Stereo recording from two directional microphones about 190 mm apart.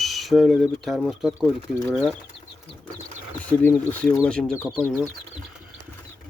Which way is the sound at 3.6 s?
10° left (ahead or behind).